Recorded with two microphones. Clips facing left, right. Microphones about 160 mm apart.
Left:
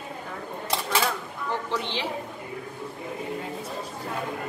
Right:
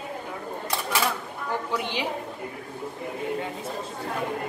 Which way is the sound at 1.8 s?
10° right (ahead or behind).